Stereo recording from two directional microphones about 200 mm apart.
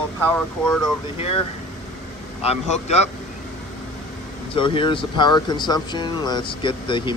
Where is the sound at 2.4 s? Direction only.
30° left (ahead or behind).